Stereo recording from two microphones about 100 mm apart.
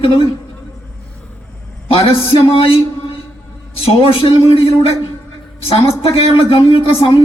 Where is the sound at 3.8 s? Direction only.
70° left (ahead or behind).